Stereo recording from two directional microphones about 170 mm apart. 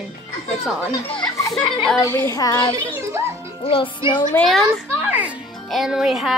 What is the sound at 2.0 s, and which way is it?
Speech, 15° left (ahead or behind).